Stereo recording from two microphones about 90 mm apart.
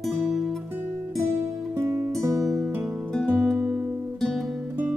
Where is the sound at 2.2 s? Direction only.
40° right (ahead or behind).